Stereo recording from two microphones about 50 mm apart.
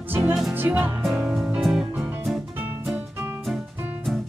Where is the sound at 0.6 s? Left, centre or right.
Right.